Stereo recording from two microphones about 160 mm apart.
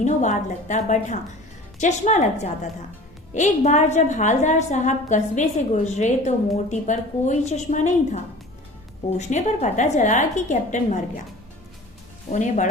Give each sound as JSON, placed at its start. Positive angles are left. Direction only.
{"t": 0.0, "sound": "a woman's voice", "side_deg": 50}
{"t": 12.3, "sound": "a woman's voice", "side_deg": 50}